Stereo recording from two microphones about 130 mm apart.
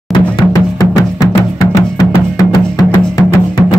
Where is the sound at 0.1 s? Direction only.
30° left (ahead or behind).